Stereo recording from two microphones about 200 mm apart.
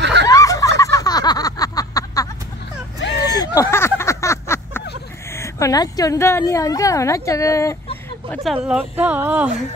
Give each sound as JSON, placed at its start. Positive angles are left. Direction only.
{"t": 0.0, "sound": "snicker", "side_deg": -60}
{"t": 0.3, "sound": "a sound", "side_deg": 15}
{"t": 3.0, "sound": "vehicle", "side_deg": 55}
{"t": 3.3, "sound": "a sound", "side_deg": 15}
{"t": 5.3, "sound": "a woman's voice", "side_deg": 15}
{"t": 8.6, "sound": "speech", "side_deg": -5}